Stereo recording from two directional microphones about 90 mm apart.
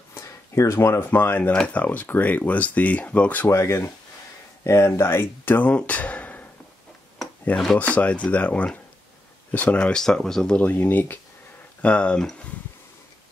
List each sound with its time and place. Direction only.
0.1 s speech: 30° left (ahead or behind); by 3.4 s 15° left (ahead or behind)
3.4 s speech: 30° left (ahead or behind)
7.5 s speech: 15° left (ahead or behind)
10.6 s speech: 20° left (ahead or behind)